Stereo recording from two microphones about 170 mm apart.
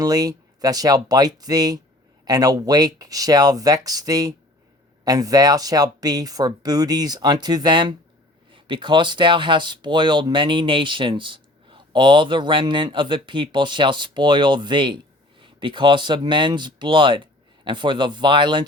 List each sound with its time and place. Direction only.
0.0 s speech: 20° right (ahead or behind)